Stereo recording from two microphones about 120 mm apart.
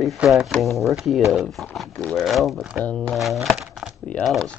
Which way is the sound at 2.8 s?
10° left (ahead or behind).